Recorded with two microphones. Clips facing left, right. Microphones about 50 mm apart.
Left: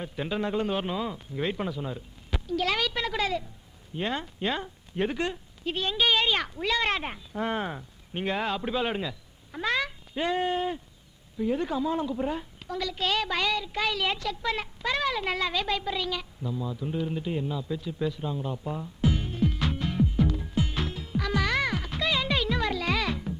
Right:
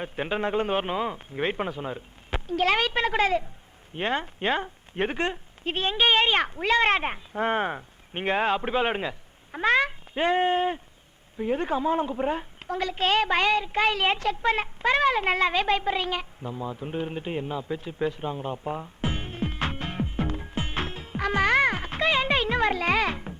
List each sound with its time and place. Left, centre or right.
0.0 s a woman's voice: right